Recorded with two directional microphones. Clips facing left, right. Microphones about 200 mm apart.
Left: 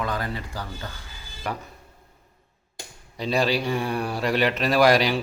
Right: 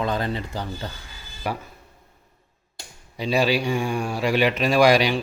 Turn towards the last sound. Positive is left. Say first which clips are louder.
# right 1 dB
turn(degrees=0)  # may be behind; listen again after turning